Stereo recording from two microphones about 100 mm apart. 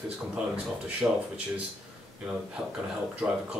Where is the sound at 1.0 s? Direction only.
15° right (ahead or behind).